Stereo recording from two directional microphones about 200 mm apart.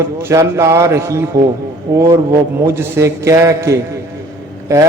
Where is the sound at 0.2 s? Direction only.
15° right (ahead or behind).